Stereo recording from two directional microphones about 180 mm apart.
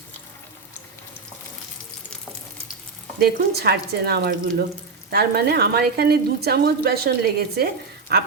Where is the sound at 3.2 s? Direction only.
60° right (ahead or behind).